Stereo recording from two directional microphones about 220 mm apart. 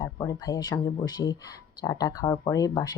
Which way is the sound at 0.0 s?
15° left (ahead or behind).